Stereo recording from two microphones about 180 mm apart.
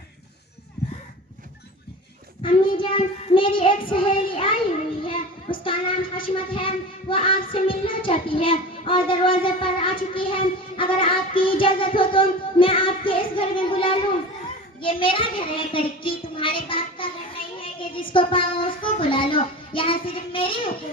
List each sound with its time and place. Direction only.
2.4 s child singing: 30° left (ahead or behind)
5.0 s a child's voice: 30° left (ahead or behind)